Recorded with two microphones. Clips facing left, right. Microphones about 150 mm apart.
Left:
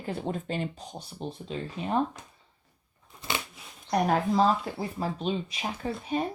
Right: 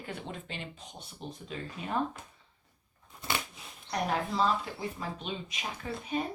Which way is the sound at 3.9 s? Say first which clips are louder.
Left 7 dB; 45° left (ahead or behind).